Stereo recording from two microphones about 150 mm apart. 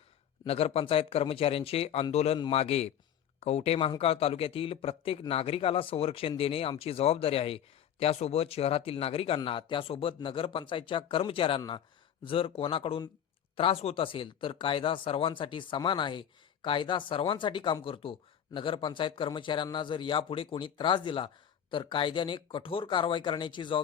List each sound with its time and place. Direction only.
0.4 s a man's voice: 40° left (ahead or behind)